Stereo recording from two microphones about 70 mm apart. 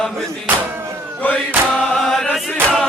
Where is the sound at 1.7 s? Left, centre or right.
Centre.